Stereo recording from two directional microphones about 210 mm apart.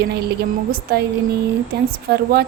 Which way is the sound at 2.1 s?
45° right (ahead or behind).